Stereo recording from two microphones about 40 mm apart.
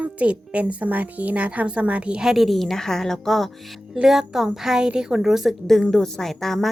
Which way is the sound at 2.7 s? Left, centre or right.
Centre.